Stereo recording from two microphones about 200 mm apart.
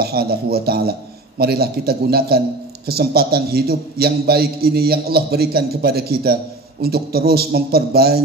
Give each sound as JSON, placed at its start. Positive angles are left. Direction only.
{"t": 0.0, "sound": "a man's voice", "side_deg": -50}